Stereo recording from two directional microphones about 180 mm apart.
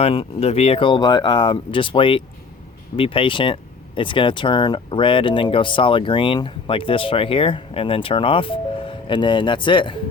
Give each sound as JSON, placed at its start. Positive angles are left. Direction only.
{"t": 0.0, "sound": "speech", "side_deg": 30}